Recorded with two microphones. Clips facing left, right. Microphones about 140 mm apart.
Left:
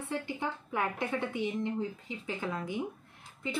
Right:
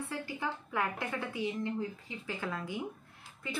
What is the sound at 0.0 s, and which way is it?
A woman's voice, 20° left (ahead or behind).